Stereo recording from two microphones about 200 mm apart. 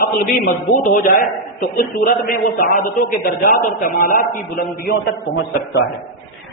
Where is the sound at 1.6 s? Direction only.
45° left (ahead or behind).